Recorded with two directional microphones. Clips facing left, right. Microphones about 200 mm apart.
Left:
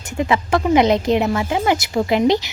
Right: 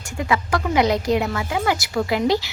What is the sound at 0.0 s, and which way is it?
A woman's voice, 25° left (ahead or behind).